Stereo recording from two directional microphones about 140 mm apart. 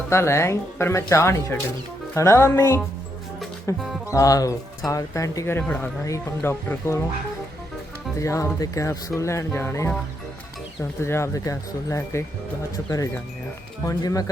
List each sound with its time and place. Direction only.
0.1 s speech: 20° left (ahead or behind)
8.2 s speech: 20° left (ahead or behind)
11.0 s speech: 20° left (ahead or behind)